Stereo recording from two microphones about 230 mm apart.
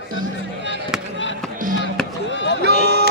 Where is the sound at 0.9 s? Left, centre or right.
Centre.